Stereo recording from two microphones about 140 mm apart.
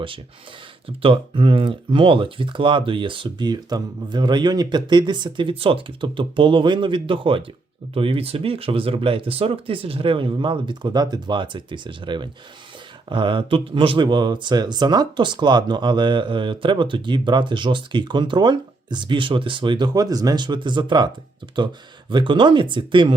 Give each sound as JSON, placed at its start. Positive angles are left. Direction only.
{"t": 0.9, "sound": "speech", "side_deg": -40}
{"t": 22.1, "sound": "speech", "side_deg": -35}